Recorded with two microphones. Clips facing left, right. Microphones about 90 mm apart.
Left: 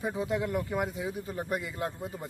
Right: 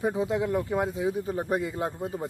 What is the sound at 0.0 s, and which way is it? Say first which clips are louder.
Speech: right 4 dB; 25° right (ahead or behind).